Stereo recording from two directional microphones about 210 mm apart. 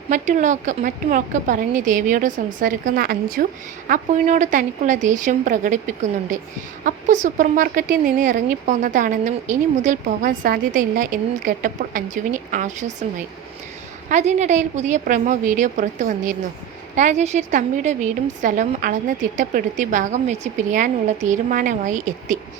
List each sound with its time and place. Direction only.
0.1 s speech: 35° right (ahead or behind)